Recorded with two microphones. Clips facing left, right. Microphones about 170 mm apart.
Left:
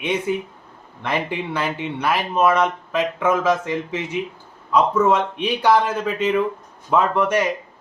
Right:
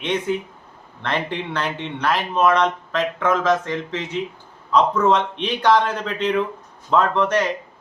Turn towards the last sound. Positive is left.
turn(degrees=10)  # may be behind; listen again after turning